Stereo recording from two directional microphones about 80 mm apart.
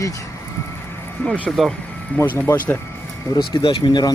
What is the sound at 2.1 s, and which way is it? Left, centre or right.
Speech, left.